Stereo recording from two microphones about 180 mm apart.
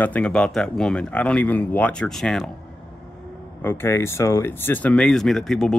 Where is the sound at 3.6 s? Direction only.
10° left (ahead or behind).